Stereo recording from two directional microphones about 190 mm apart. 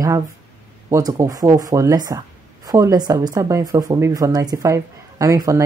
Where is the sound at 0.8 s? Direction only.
20° right (ahead or behind).